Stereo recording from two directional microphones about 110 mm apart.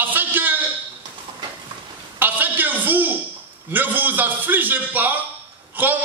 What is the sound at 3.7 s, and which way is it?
A man's voice, 15° right (ahead or behind).